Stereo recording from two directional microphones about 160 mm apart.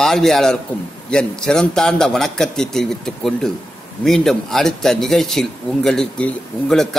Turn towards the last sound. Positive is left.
turn(degrees=5)  # may be behind; listen again after turning